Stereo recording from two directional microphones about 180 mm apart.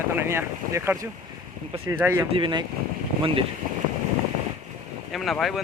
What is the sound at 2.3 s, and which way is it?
Speech, 30° right (ahead or behind).